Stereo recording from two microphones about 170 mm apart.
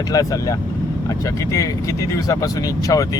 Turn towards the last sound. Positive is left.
turn(degrees=20)  # may be behind; listen again after turning